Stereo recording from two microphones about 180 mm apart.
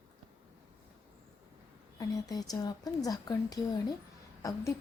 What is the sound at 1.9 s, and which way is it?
A woman's voice, 20° left (ahead or behind).